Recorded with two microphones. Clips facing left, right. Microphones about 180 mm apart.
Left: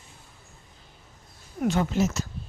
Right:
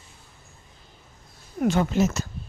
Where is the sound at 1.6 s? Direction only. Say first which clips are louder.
Right 2 dB; 65° right (ahead or behind).